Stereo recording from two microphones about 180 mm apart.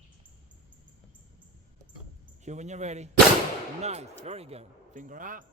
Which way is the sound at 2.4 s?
40° right (ahead or behind).